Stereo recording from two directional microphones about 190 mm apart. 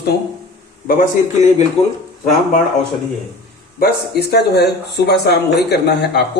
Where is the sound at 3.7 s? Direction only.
55° left (ahead or behind).